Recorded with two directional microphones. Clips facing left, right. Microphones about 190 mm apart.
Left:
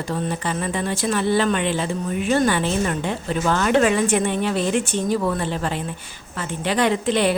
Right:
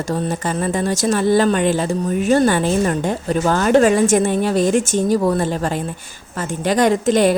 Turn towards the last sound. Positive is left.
turn(degrees=-45)  # may be behind; listen again after turning